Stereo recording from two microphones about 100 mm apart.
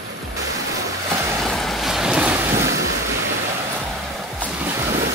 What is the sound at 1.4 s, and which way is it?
Waves, centre (ahead or behind).